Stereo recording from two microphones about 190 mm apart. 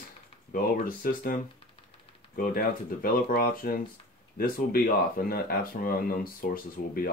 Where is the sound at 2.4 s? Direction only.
50° left (ahead or behind).